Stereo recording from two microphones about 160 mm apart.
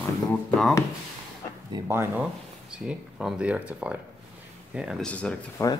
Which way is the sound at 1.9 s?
15° right (ahead or behind).